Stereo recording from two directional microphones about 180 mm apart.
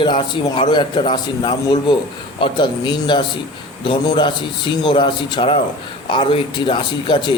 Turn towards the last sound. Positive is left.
turn(degrees=25)  # may be behind; listen again after turning